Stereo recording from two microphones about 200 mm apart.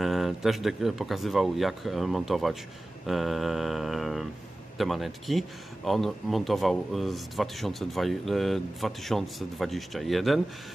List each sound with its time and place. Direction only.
0.0 s speech: centre (ahead or behind)